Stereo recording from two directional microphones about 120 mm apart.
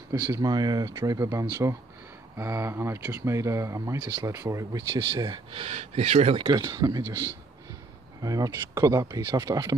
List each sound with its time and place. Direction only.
0.3 s speech: 35° right (ahead or behind)
4.0 s speech: 40° right (ahead or behind)
4.3 s speech: 25° right (ahead or behind)
4.8 s speech: 40° right (ahead or behind)
5.5 s speech: 55° right (ahead or behind)
6.4 s speech: 30° right (ahead or behind)
8.2 s speech: 30° right (ahead or behind)